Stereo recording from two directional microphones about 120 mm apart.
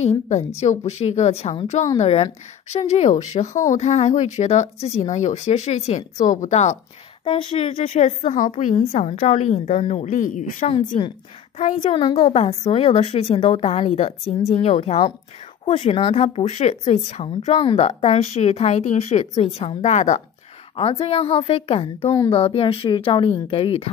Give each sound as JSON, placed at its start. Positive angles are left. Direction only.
{"t": 0.6, "sound": "speech", "side_deg": 65}
{"t": 7.2, "sound": "a woman's voice", "side_deg": 50}
{"t": 11.5, "sound": "a woman's voice", "side_deg": 80}
{"t": 11.8, "sound": "speech", "side_deg": 40}
{"t": 17.6, "sound": "speech", "side_deg": 55}
{"t": 20.7, "sound": "a woman's voice", "side_deg": 55}